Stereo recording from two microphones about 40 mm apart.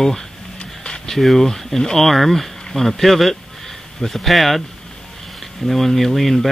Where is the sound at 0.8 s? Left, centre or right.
Left.